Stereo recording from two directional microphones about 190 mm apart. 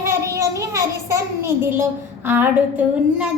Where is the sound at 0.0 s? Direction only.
15° right (ahead or behind).